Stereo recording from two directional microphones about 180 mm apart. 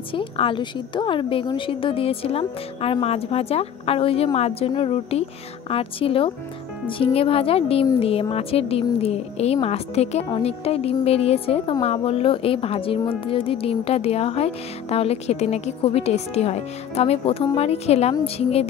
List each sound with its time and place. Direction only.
0.1 s speech: 30° left (ahead or behind)